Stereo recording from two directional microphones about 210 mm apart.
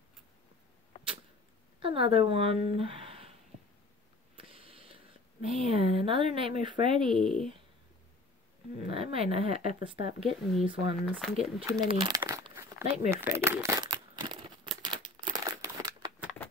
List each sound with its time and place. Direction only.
0.9 s arrow: 25° left (ahead or behind)
1.8 s speech: 25° right (ahead or behind)
2.7 s a sound: 25° right (ahead or behind)
4.4 s a sound: 25° right (ahead or behind)
7.2 s speech: centre (ahead or behind)
8.8 s speech: 25° right (ahead or behind)
11.1 s speech: centre (ahead or behind)
11.8 s speech: 20° right (ahead or behind)
12.2 s crumpling: 15° right (ahead or behind)